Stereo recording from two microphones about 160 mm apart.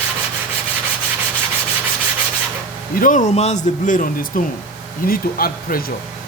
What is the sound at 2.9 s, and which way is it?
Speech, 55° left (ahead or behind).